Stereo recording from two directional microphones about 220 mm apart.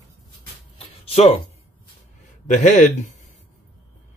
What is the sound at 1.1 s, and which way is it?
Speech, 30° left (ahead or behind).